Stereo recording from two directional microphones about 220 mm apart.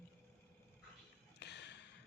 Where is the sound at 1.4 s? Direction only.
50° left (ahead or behind).